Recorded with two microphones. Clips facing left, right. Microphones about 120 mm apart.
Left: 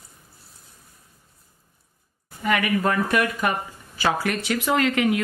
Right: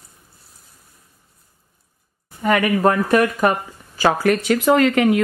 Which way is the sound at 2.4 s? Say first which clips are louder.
Right 6 dB; 40° right (ahead or behind).